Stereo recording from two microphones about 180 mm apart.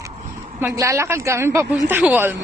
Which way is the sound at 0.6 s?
15° right (ahead or behind).